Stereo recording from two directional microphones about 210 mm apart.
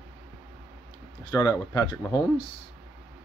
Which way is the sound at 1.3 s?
15° left (ahead or behind).